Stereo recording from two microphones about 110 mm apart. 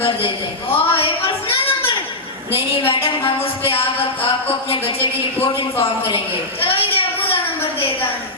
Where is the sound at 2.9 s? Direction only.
55° left (ahead or behind).